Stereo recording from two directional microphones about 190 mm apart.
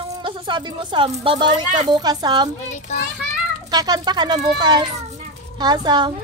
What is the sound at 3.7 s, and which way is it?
A woman's voice, 20° right (ahead or behind).